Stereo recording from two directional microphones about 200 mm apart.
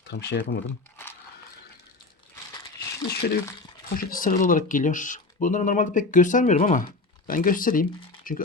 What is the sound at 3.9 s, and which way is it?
Speech, 45° left (ahead or behind).